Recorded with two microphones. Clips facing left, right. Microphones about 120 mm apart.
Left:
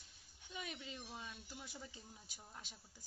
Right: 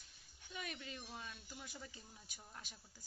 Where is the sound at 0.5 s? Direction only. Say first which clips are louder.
Even; 20° left (ahead or behind).